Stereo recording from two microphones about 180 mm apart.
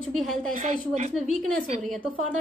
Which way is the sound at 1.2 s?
Centre (ahead or behind).